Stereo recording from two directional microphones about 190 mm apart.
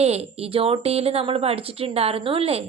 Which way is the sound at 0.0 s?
35° right (ahead or behind).